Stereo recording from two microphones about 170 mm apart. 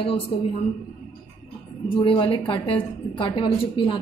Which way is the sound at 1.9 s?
30° left (ahead or behind).